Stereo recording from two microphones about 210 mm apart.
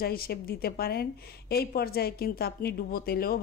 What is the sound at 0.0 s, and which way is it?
Speech, 45° left (ahead or behind).